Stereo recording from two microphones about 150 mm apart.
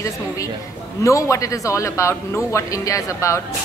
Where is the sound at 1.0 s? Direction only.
20° left (ahead or behind).